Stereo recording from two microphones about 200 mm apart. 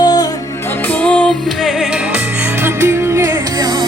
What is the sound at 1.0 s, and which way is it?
Music, 5° left (ahead or behind).